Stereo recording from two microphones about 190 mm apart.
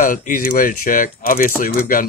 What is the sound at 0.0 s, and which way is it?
Speech, 45° left (ahead or behind).